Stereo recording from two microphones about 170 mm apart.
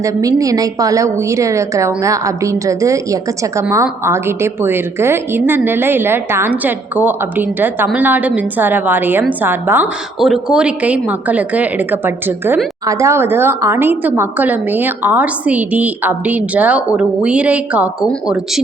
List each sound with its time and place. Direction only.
0.0 s a woman's voice: 20° right (ahead or behind)